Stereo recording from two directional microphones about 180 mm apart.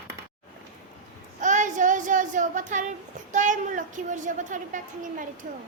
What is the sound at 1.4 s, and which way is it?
Speech, 45° right (ahead or behind).